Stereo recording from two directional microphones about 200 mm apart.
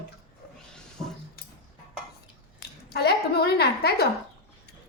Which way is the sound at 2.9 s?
55° left (ahead or behind).